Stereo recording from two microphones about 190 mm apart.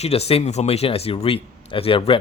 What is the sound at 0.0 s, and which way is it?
Speech, 35° left (ahead or behind).